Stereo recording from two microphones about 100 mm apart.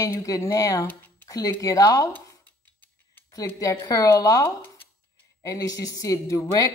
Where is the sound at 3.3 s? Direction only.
35° left (ahead or behind).